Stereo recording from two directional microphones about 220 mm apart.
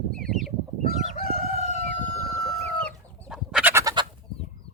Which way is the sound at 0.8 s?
40° left (ahead or behind).